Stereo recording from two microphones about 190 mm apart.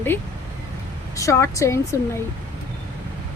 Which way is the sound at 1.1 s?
15° left (ahead or behind).